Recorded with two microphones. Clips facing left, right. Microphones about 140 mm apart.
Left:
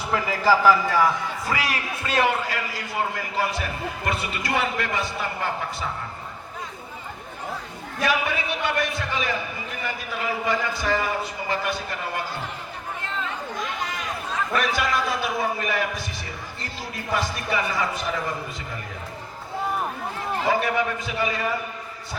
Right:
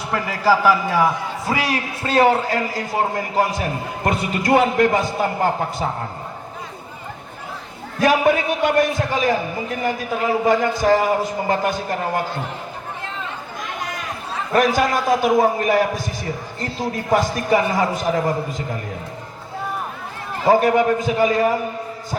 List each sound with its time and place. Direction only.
0.1 s a man's voice: centre (ahead or behind)
1.5 s a man's voice: 25° right (ahead or behind)
8.0 s a man's voice: 45° right (ahead or behind)
14.5 s a man's voice: 40° right (ahead or behind)
20.5 s a man's voice: 40° right (ahead or behind)